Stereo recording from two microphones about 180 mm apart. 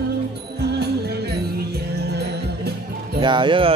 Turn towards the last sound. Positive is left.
turn(degrees=-30)  # may be behind; listen again after turning